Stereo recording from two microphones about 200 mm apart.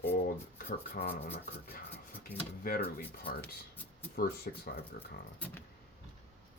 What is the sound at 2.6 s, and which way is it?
Speech, 50° left (ahead or behind).